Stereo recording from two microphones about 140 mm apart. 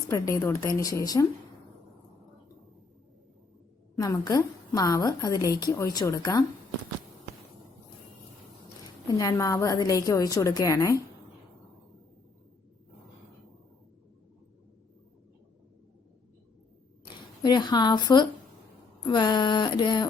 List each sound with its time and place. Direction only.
0.1 s a woman's voice: 25° left (ahead or behind)
3.9 s a woman's voice: 30° left (ahead or behind)
9.0 s a woman's voice: 25° left (ahead or behind)
17.2 s a woman's voice: 30° left (ahead or behind)